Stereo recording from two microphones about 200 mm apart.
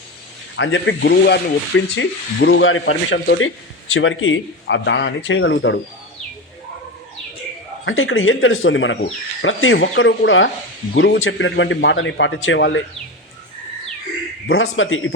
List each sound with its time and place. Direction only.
0.5 s speech: 65° left (ahead or behind)
7.9 s speech: 85° left; by 12.8 s 65° left (ahead or behind)
14.5 s speech: 85° left